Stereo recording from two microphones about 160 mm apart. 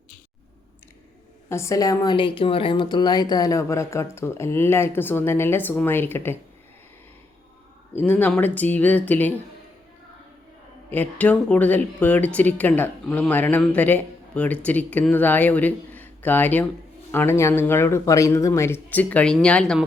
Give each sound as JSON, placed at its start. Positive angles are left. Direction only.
{"t": 1.5, "sound": "speech", "side_deg": 15}
{"t": 7.9, "sound": "speech", "side_deg": 10}
{"t": 10.8, "sound": "speech", "side_deg": 10}